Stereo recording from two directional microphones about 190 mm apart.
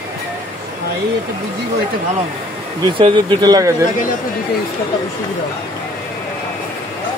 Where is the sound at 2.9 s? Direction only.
25° right (ahead or behind).